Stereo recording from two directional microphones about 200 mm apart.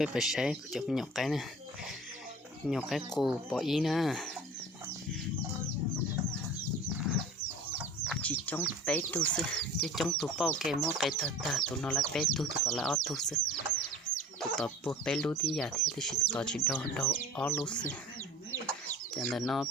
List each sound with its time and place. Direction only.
0.0 s speech: centre (ahead or behind)
2.6 s speech: centre (ahead or behind)
8.0 s chicken: 5° left (ahead or behind)
8.9 s speech: 10° left (ahead or behind)
19.1 s speech: centre (ahead or behind)